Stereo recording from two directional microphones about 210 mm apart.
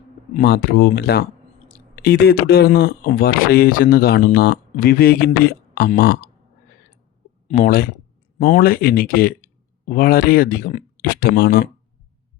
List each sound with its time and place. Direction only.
0.4 s speech: 50° left (ahead or behind)
7.5 s speech: 45° left (ahead or behind)